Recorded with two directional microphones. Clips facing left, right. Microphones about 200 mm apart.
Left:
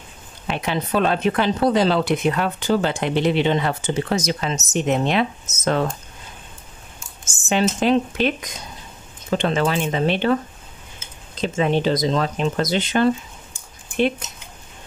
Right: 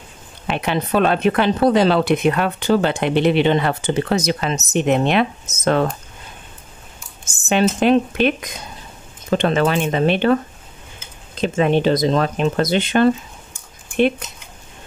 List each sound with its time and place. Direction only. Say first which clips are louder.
0.5 s speech: right 3 dB; 60° right (ahead or behind)
7.3 s speech: right 3 dB; 60° right (ahead or behind)
11.4 s speech: right 3 dB; 55° right (ahead or behind)